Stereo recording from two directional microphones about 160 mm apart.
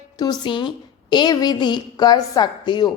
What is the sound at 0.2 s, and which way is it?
A woman's voice, 30° left (ahead or behind).